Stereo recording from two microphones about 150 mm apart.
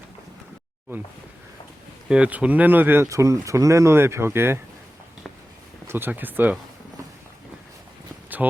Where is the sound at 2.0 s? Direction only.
5° right (ahead or behind).